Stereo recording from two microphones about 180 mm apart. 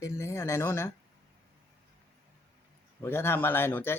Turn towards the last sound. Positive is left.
turn(degrees=10)  # may be behind; listen again after turning